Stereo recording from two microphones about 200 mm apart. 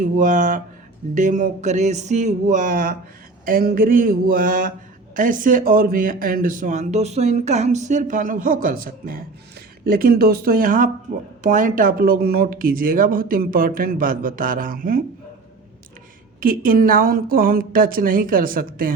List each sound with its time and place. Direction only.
0.0 s speech: 40° right (ahead or behind)
16.4 s speech: 45° right (ahead or behind)